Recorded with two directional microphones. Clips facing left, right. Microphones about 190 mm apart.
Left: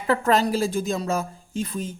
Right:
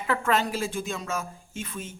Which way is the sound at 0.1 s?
35° left (ahead or behind).